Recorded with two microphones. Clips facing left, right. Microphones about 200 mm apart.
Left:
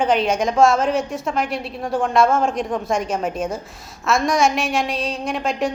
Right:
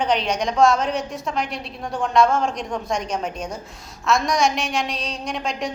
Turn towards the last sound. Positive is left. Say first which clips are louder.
# left 5 dB
turn(degrees=0)  # may be behind; listen again after turning